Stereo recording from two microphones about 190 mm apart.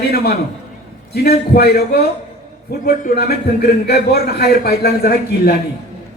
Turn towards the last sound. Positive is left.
turn(degrees=55)  # may be behind; listen again after turning